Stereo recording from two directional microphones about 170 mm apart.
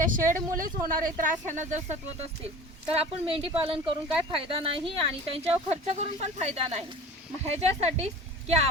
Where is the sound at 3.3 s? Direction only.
35° right (ahead or behind).